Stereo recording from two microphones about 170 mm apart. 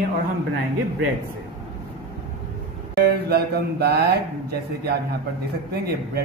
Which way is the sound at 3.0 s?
70° right (ahead or behind).